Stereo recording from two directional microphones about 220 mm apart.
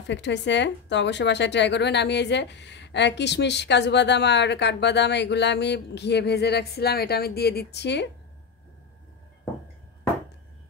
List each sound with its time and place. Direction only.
0.1 s a woman's voice: 55° left (ahead or behind)